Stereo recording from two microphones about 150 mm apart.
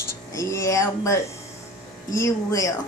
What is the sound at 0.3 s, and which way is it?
Speech, 20° left (ahead or behind).